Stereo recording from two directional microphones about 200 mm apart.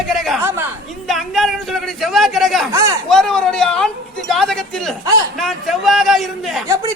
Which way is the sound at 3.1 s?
5° left (ahead or behind).